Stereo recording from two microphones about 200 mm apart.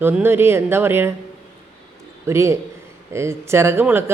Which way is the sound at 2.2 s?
15° right (ahead or behind).